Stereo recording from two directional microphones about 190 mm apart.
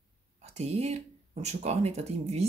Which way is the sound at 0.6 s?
35° right (ahead or behind).